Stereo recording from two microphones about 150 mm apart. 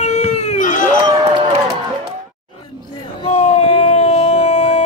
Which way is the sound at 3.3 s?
50° left (ahead or behind).